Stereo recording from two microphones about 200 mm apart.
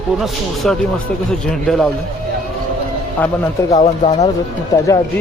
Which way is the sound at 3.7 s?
35° left (ahead or behind).